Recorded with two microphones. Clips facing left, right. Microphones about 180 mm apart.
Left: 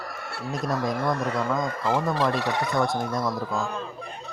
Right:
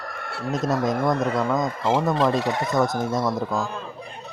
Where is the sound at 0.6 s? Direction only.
20° right (ahead or behind).